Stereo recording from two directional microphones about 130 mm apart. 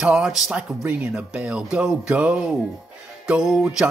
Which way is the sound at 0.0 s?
5° right (ahead or behind).